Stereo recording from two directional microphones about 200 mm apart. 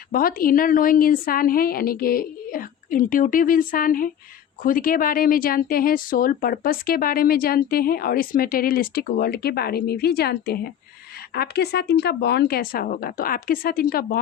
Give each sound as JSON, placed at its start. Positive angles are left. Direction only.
{"t": 0.1, "sound": "speech", "side_deg": 45}